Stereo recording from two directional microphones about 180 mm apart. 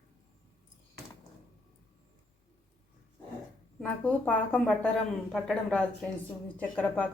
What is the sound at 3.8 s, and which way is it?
A woman's voice, 10° left (ahead or behind).